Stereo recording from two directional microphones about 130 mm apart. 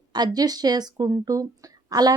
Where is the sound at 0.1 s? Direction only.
30° right (ahead or behind).